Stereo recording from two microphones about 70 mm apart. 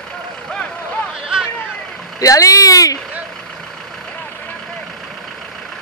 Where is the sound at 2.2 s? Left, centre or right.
Left.